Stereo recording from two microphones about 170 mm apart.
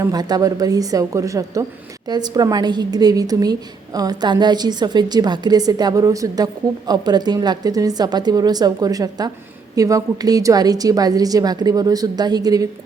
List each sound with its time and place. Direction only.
0.0 s a woman's voice: 25° right (ahead or behind)